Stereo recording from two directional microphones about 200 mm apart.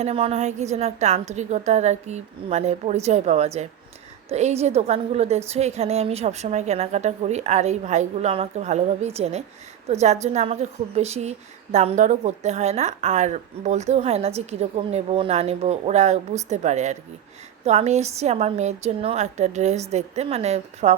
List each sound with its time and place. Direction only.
0.0 s a woman's voice: 30° right (ahead or behind)